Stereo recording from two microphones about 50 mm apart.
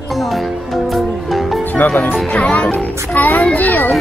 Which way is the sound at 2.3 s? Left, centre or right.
Left.